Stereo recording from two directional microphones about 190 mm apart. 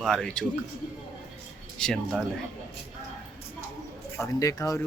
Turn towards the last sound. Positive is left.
turn(degrees=15)  # may be behind; listen again after turning